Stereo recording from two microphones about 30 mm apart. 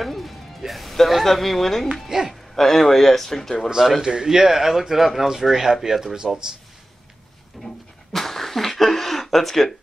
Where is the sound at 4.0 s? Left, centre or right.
Right.